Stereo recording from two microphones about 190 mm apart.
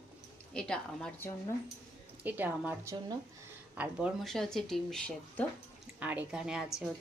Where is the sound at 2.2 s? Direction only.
10° right (ahead or behind).